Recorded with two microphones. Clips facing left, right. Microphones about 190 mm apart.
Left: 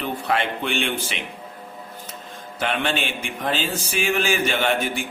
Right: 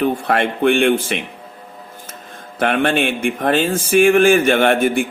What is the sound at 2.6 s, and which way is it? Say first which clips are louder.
Speech: right 8 dB; 55° right (ahead or behind).